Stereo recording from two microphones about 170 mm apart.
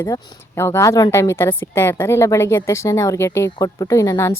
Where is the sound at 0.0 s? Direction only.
15° left (ahead or behind).